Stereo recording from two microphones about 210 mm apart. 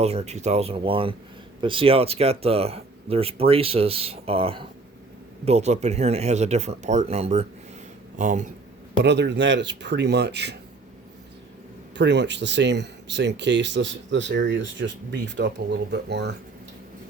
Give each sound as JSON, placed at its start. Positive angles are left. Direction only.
{"t": 0.0, "sound": "speech", "side_deg": -30}
{"t": 9.0, "sound": "speech", "side_deg": -55}
{"t": 11.9, "sound": "speech", "side_deg": -55}